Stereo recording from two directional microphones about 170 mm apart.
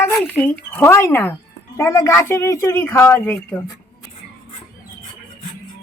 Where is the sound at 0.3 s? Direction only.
10° left (ahead or behind).